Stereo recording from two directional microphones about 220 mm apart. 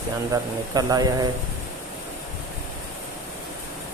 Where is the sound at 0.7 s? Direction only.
15° right (ahead or behind).